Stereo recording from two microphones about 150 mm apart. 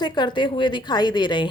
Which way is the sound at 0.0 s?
30° left (ahead or behind).